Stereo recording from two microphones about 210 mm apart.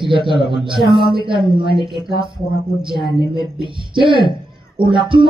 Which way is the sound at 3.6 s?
25° right (ahead or behind).